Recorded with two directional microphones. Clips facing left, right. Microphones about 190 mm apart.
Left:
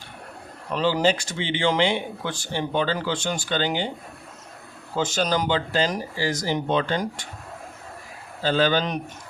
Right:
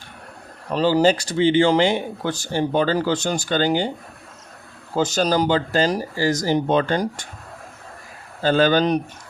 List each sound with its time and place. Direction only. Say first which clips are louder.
0.7 s speech: right 5 dB; 35° right (ahead or behind)
4.9 s speech: right 4 dB; 40° right (ahead or behind)
8.4 s speech: right 4 dB; 50° right (ahead or behind)